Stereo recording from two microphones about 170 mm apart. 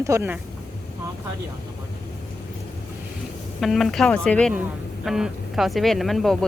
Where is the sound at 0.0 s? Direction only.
15° right (ahead or behind).